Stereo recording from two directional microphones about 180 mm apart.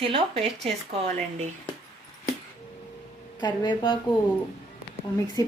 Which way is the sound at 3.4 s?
25° left (ahead or behind).